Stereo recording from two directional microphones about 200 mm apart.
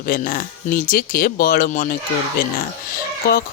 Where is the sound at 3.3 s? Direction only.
45° left (ahead or behind).